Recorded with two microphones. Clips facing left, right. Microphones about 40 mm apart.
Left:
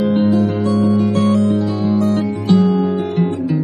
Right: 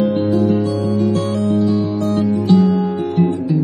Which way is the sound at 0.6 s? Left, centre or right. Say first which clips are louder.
Left 2 dB; centre.